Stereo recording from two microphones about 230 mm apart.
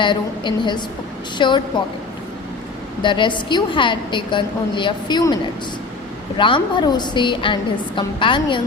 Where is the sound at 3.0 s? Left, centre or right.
Left.